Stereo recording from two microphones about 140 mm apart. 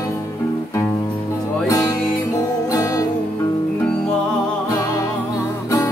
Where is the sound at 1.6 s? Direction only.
25° left (ahead or behind).